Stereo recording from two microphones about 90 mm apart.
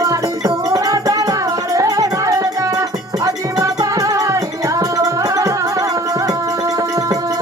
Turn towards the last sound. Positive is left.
turn(degrees=-45)  # may be behind; listen again after turning